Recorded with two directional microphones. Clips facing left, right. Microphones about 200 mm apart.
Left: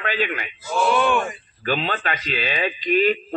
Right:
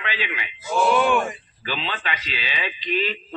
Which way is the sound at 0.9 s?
10° right (ahead or behind).